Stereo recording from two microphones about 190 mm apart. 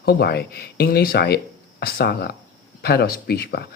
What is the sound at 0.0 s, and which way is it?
A man's voice, 55° left (ahead or behind).